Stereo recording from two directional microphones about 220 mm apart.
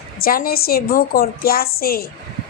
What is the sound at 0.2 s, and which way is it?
A woman's voice, 40° left (ahead or behind).